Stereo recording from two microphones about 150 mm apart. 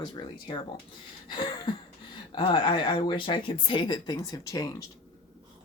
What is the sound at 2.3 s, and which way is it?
Speech, 35° left (ahead or behind).